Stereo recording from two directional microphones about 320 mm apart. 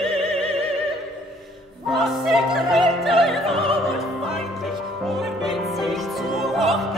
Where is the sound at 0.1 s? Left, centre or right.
Centre.